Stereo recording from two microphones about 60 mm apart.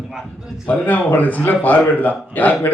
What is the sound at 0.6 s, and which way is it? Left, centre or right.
A man's voice, left.